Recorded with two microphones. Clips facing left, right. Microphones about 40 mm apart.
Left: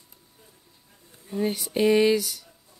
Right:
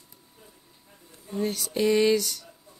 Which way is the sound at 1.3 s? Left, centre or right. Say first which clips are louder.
Left 2 dB; centre.